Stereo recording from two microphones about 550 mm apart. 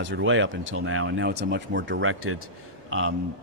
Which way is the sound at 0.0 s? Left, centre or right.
Centre.